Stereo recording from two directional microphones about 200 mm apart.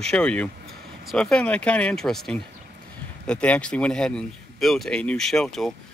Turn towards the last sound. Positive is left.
turn(degrees=0)  # may be behind; listen again after turning